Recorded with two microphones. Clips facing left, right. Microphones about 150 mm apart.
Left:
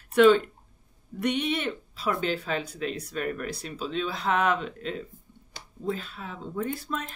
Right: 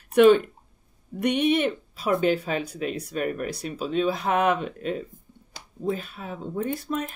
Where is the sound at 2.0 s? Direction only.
15° right (ahead or behind).